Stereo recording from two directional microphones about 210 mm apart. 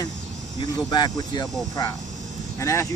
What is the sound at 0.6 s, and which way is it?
Speech, 20° left (ahead or behind).